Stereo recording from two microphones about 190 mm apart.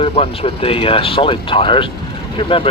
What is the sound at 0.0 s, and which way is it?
Speech, 30° left (ahead or behind).